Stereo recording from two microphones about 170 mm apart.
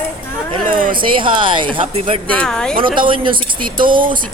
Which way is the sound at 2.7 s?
30° right (ahead or behind).